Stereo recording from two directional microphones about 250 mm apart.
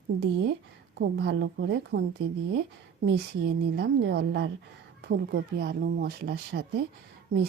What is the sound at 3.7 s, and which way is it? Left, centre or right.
A woman's voice, right.